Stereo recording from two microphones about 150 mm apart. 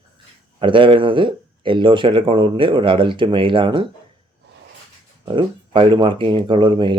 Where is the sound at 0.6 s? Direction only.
35° right (ahead or behind).